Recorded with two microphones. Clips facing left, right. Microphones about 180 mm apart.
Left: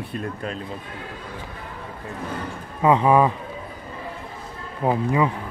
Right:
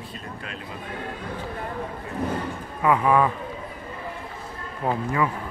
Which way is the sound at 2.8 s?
25° left (ahead or behind).